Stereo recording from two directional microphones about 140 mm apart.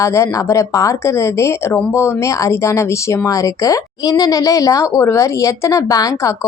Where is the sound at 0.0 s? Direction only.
20° left (ahead or behind).